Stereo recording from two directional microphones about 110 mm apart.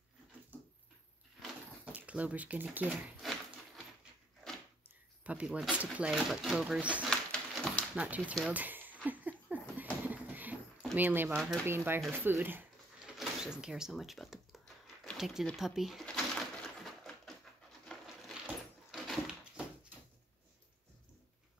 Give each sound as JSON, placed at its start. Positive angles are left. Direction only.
{"t": 2.0, "sound": "speech", "side_deg": -10}
{"t": 3.2, "sound": "a sound", "side_deg": 0}
{"t": 5.2, "sound": "speech", "side_deg": -10}
{"t": 7.1, "sound": "pigeon", "side_deg": 10}
{"t": 7.9, "sound": "speech", "side_deg": -10}
{"t": 8.5, "sound": "a sound", "side_deg": -15}
{"t": 11.0, "sound": "speech", "side_deg": -15}
{"t": 11.2, "sound": "speech", "side_deg": -5}
{"t": 11.6, "sound": "speech", "side_deg": -20}
{"t": 13.0, "sound": "door", "side_deg": -5}
{"t": 15.1, "sound": "speech", "side_deg": -5}
{"t": 15.5, "sound": "bird", "side_deg": -5}
{"t": 18.9, "sound": "a sound", "side_deg": 0}